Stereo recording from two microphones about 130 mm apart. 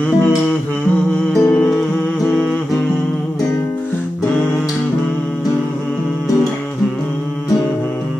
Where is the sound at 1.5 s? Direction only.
10° left (ahead or behind).